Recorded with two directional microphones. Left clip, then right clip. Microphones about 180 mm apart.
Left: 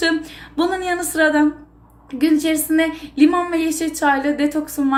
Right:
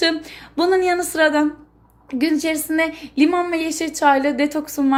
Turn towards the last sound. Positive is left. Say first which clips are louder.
# even
turn(degrees=-35)  # may be behind; listen again after turning